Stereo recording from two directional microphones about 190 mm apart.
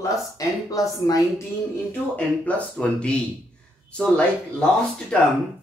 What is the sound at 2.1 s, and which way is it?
Speech, 5° left (ahead or behind).